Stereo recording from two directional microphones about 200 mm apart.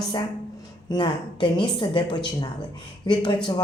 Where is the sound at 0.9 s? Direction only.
20° left (ahead or behind).